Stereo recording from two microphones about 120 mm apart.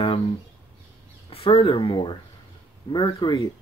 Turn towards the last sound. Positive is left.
turn(degrees=40)  # may be behind; listen again after turning